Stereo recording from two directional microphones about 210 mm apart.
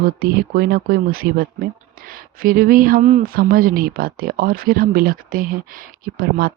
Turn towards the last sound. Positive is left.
turn(degrees=-45)  # may be behind; listen again after turning